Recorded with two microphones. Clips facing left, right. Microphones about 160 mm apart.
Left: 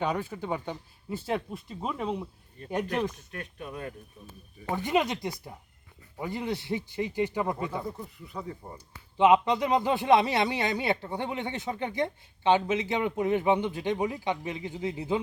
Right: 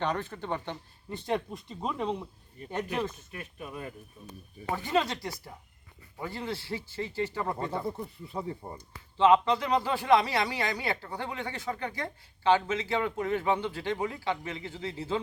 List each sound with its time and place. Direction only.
0.0 s speech: 10° left (ahead or behind)
3.3 s speech: 5° right (ahead or behind)
4.7 s speech: 20° left (ahead or behind)
7.7 s speech: 30° right (ahead or behind)
9.1 s speech: 15° left (ahead or behind)